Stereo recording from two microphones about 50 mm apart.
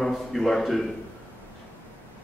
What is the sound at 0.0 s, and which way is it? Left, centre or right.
Speech, centre.